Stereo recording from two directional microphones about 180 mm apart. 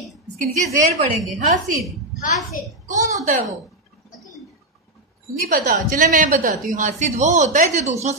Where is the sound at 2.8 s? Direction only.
45° right (ahead or behind).